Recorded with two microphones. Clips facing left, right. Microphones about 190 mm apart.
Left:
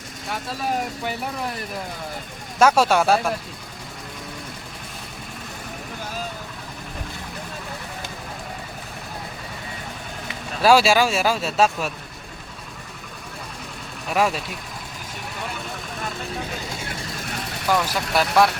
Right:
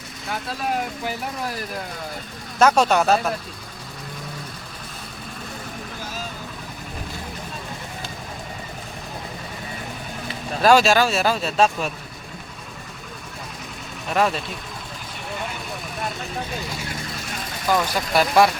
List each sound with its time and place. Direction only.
0.3 s speech: centre (ahead or behind)
2.6 s speech: 5° left (ahead or behind)
10.6 s speech: 5° left (ahead or behind)
14.1 s speech: 5° left (ahead or behind)
17.7 s speech: 5° left (ahead or behind)